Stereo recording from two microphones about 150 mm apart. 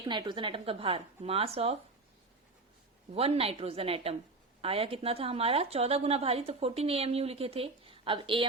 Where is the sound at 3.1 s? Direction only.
40° right (ahead or behind).